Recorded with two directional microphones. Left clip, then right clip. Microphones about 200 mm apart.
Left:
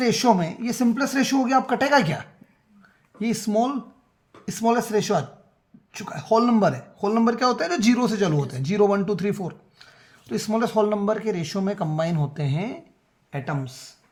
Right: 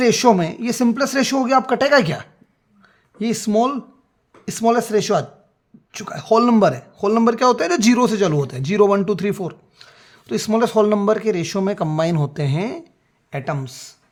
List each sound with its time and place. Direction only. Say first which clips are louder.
0.0 s speech: right 5 dB; 45° right (ahead or behind)
2.8 s a sound: right 4 dB; 40° right (ahead or behind)
4.4 s speech: right 5 dB; 40° right (ahead or behind)